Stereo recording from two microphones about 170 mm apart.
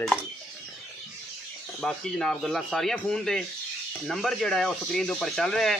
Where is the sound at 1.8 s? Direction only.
5° left (ahead or behind).